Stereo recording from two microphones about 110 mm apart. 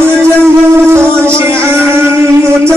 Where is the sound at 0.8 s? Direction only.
20° right (ahead or behind).